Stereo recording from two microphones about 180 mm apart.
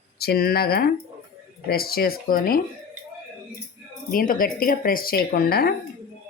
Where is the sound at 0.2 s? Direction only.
60° left (ahead or behind).